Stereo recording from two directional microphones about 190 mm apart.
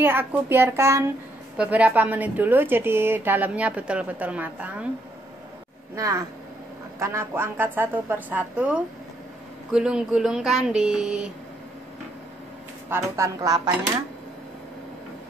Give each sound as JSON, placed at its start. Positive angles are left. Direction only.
{"t": 0.0, "sound": "a woman's voice", "side_deg": -10}
{"t": 7.0, "sound": "a woman's voice", "side_deg": -15}
{"t": 12.9, "sound": "a woman's voice", "side_deg": -15}